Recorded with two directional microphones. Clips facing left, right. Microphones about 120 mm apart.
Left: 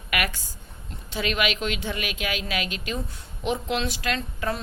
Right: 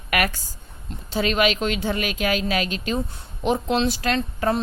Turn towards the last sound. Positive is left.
turn(degrees=-35)  # may be behind; listen again after turning